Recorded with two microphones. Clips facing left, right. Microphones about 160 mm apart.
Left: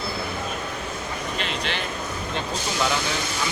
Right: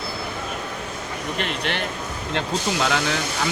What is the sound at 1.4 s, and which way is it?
Speech, 60° right (ahead or behind).